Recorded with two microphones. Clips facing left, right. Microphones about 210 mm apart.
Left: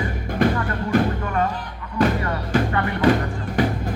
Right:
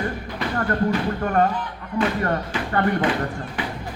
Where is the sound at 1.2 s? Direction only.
45° right (ahead or behind).